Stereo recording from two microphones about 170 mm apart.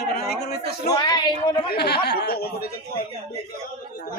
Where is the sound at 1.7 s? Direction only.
75° left (ahead or behind).